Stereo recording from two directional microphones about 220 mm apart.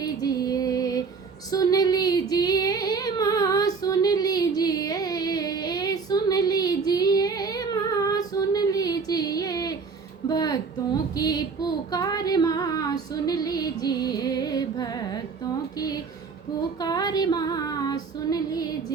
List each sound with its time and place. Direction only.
0.0 s music: 15° left (ahead or behind)
1.5 s female singing: 15° left (ahead or behind)
10.2 s a sound: 15° left (ahead or behind)
11.9 s female singing: 15° left (ahead or behind)
16.8 s female singing: 15° left (ahead or behind)